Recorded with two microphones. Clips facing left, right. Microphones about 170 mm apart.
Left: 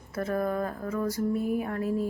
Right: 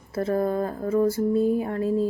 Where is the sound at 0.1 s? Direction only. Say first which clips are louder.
Right 5 dB; 30° right (ahead or behind).